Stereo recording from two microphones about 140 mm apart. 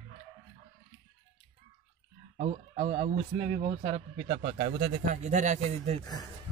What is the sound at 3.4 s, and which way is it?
Speech, 35° right (ahead or behind).